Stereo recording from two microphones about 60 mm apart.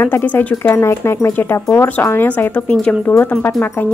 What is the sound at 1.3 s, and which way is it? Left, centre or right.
Speech, left.